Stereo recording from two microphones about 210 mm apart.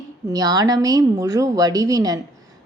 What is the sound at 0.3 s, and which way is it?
A woman's voice, 15° right (ahead or behind).